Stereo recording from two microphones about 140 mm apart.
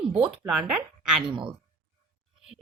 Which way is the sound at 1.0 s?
5° right (ahead or behind).